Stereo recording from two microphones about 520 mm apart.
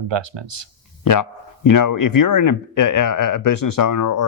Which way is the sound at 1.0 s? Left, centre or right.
Left.